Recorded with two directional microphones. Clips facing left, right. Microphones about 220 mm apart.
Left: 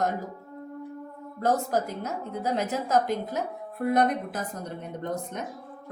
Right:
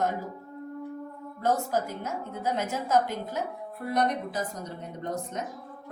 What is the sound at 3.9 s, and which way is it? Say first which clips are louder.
Speech: left 3 dB; 55° left (ahead or behind).